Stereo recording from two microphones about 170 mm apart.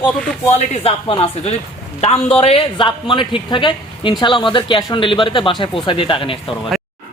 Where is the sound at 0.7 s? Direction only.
35° left (ahead or behind).